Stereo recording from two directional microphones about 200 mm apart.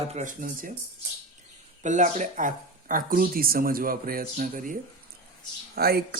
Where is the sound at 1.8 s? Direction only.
40° right (ahead or behind).